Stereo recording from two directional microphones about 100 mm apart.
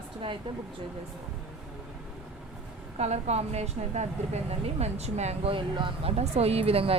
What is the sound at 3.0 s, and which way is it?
Speech, 90° right.